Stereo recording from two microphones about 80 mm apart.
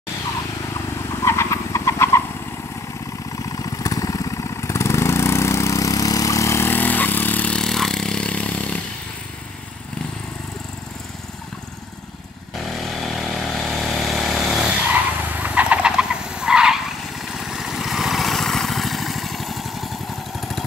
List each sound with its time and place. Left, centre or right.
1.2 s vehicle: left
3.5 s vehicle: left
7.5 s vehicle: centre
12.8 s vehicle: centre
14.8 s vehicle: right; by 20.6 s centre